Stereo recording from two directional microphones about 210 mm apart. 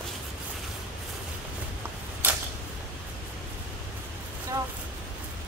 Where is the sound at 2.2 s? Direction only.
10° right (ahead or behind).